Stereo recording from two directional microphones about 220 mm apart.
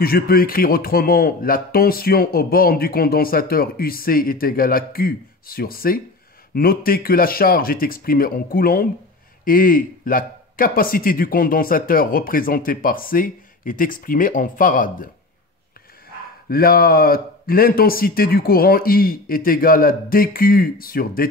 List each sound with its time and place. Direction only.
0.0 s a man's voice: 45° left (ahead or behind)
16.4 s a man's voice: 40° left (ahead or behind)